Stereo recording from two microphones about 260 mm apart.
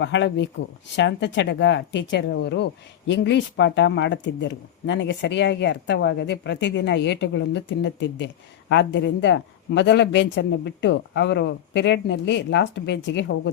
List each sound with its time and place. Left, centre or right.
0.0 s speech: left